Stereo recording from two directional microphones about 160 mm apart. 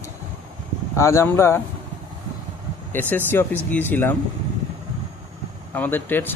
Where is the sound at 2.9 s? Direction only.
10° left (ahead or behind).